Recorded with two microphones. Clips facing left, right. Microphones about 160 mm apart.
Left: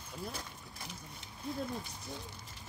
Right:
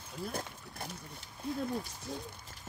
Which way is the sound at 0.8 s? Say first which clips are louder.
Right 5 dB; 60° right (ahead or behind).